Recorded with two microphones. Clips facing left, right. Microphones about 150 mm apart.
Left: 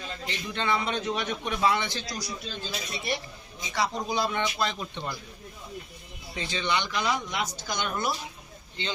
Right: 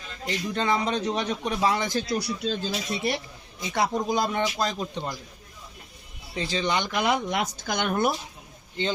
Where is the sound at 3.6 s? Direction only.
55° right (ahead or behind).